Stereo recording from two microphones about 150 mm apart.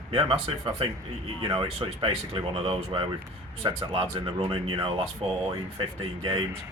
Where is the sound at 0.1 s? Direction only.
35° right (ahead or behind).